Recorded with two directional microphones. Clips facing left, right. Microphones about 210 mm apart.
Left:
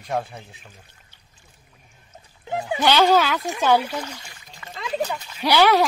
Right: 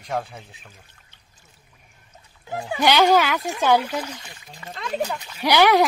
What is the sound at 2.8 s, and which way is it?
Speech, 15° right (ahead or behind).